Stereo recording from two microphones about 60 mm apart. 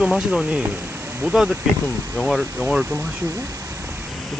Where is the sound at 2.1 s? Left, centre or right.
Centre.